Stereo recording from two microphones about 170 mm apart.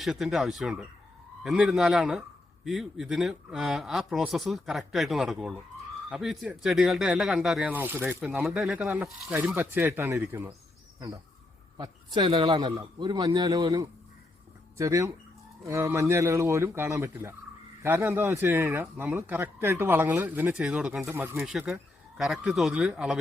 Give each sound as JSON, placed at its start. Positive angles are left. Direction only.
{"t": 0.0, "sound": "speech", "side_deg": 0}
{"t": 11.8, "sound": "a man's voice", "side_deg": -25}
{"t": 21.3, "sound": "speech", "side_deg": -5}